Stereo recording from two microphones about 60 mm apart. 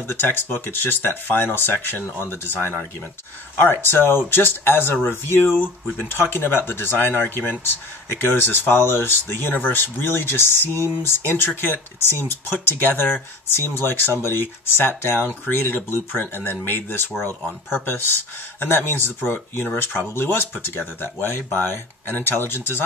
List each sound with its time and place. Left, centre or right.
0.0 s speech: left